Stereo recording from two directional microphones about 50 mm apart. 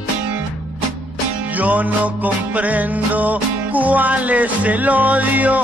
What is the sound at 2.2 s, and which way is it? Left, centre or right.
Music, right.